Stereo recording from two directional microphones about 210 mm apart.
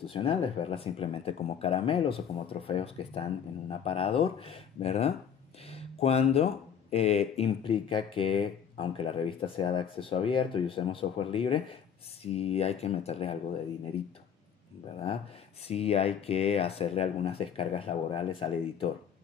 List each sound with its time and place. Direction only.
0.1 s speech: 25° left (ahead or behind)
15.6 s speech: 30° left (ahead or behind)